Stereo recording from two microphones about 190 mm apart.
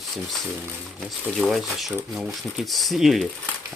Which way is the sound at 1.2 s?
Centre (ahead or behind).